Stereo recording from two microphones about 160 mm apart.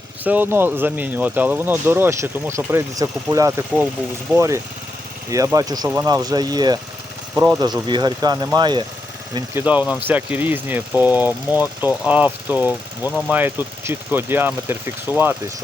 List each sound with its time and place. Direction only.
0.3 s speech: 10° right (ahead or behind); by 8.8 s 30° right (ahead or behind)
9.6 s speech: 10° right (ahead or behind)
13.1 s speech: 5° left (ahead or behind)
13.3 s speech: 10° right (ahead or behind)